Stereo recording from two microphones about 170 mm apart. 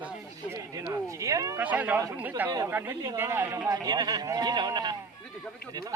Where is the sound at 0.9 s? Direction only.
20° right (ahead or behind).